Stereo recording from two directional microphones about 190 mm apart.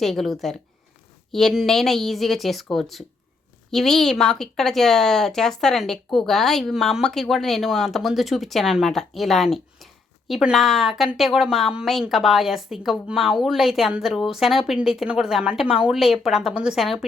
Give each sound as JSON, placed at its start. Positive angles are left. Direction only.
{"t": 0.0, "sound": "speech", "side_deg": 0}